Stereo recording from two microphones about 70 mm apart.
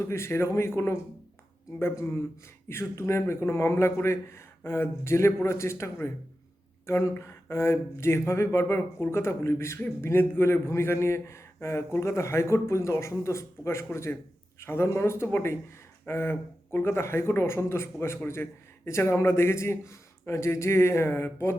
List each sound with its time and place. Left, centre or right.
0.1 s a man's voice: left
2.7 s a man's voice: left